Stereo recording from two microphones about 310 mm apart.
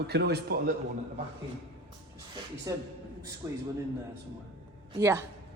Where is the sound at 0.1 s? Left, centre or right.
Right.